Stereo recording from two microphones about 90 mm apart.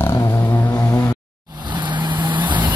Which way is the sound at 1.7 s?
60° right (ahead or behind).